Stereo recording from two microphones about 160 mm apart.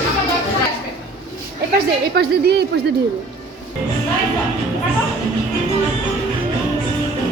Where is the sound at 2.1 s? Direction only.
85° right.